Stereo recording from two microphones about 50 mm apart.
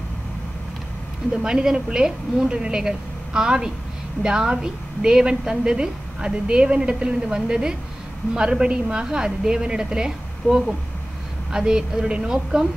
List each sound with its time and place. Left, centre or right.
1.3 s a woman's voice: centre